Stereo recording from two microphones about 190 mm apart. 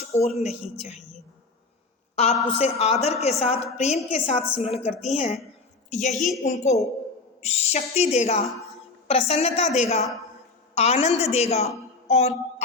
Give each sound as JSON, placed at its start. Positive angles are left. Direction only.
{"t": 0.2, "sound": "a woman's voice", "side_deg": 35}
{"t": 2.1, "sound": "a woman's voice", "side_deg": 35}
{"t": 6.1, "sound": "a woman's voice", "side_deg": 0}
{"t": 6.6, "sound": "a woman's voice", "side_deg": 35}